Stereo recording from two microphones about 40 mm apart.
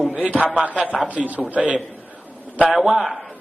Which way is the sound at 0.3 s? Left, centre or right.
Right.